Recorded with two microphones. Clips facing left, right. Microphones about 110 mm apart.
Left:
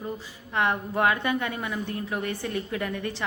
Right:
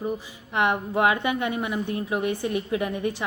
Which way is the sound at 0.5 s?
20° right (ahead or behind).